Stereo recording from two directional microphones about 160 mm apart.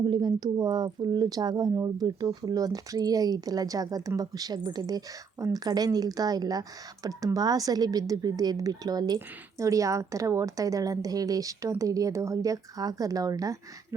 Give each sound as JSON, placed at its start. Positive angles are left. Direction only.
{"t": 0.0, "sound": "speech", "side_deg": -25}